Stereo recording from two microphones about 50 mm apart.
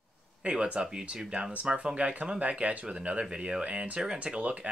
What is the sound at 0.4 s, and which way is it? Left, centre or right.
Speech, right.